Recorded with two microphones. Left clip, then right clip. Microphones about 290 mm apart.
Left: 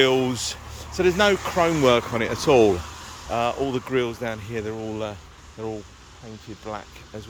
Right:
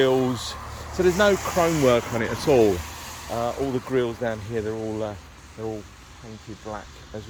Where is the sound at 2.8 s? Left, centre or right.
Right.